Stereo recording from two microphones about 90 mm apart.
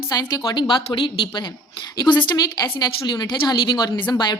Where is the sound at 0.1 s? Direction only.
45° left (ahead or behind); by 1.5 s 65° left (ahead or behind).